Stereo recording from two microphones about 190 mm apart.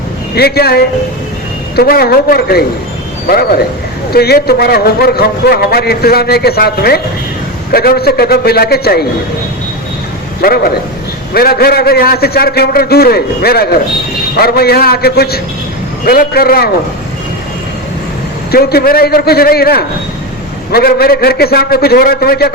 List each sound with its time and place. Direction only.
0.3 s a man's voice: 55° left (ahead or behind)
10.4 s a man's voice: 55° left (ahead or behind)
18.5 s a man's voice: 55° left (ahead or behind)